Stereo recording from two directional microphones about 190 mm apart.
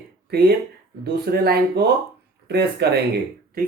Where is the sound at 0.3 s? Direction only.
55° right (ahead or behind).